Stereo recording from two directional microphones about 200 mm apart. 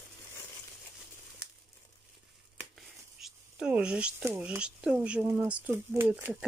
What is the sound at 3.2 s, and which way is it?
Speech, 5° right (ahead or behind).